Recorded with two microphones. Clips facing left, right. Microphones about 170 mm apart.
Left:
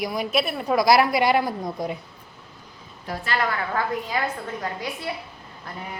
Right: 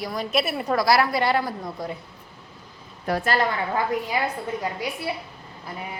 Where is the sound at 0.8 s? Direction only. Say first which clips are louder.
Left 3 dB; 15° left (ahead or behind).